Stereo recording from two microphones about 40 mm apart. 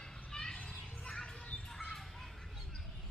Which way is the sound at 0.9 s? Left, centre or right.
Left.